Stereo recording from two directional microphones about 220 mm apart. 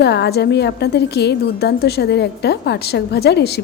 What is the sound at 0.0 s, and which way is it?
A woman's voice, 50° left (ahead or behind).